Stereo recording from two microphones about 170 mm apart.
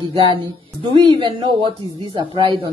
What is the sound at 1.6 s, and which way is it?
Speech, 30° right (ahead or behind).